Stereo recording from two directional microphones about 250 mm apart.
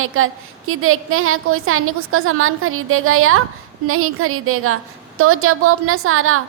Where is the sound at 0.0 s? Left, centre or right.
Right.